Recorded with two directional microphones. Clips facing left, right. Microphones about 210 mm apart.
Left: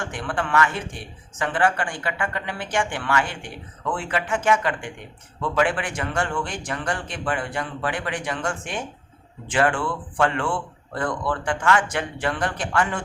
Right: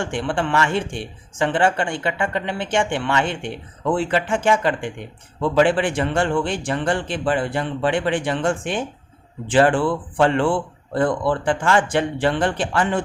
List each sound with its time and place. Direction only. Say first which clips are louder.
0.0 s a man's voice: right 5 dB; 30° right (ahead or behind)